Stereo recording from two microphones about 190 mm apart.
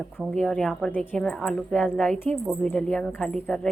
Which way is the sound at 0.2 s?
5° left (ahead or behind).